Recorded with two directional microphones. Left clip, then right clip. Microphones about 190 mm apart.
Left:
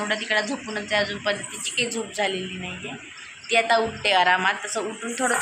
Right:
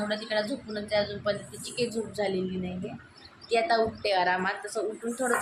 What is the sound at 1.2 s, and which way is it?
Speech, centre (ahead or behind).